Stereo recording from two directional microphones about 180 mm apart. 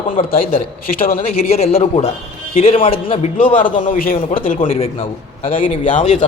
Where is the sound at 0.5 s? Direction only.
50° left (ahead or behind).